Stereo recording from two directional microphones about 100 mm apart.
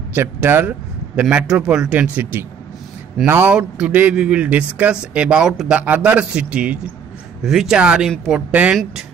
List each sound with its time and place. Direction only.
0.1 s a man's voice: 25° right (ahead or behind)
1.3 s speech: 10° right (ahead or behind)
3.5 s speech: 10° right (ahead or behind)